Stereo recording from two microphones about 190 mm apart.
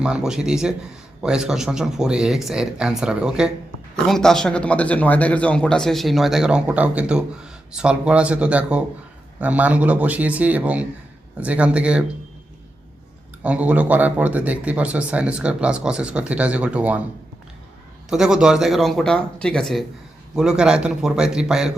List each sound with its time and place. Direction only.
0.0 s speech: 5° right (ahead or behind)
13.4 s speech: 5° right (ahead or behind)
18.1 s speech: 5° right (ahead or behind)